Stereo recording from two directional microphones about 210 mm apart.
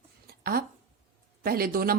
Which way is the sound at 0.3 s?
45° right (ahead or behind).